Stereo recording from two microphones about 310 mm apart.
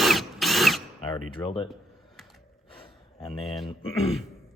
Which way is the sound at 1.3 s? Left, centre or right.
Centre.